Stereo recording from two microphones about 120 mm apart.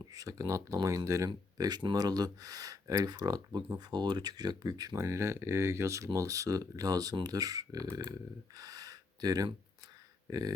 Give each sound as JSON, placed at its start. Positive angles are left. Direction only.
{"t": 0.0, "sound": "speech", "side_deg": -30}
{"t": 8.5, "sound": "gasp", "side_deg": -30}
{"t": 10.2, "sound": "speech", "side_deg": -30}